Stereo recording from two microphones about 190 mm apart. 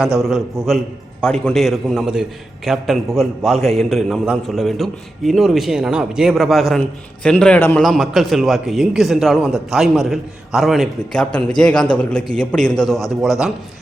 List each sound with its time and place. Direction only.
0.2 s a man's voice: centre (ahead or behind)
13.0 s a man's voice: 15° left (ahead or behind)